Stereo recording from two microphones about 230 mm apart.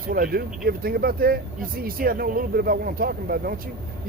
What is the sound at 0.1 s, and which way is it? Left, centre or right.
Speech, right.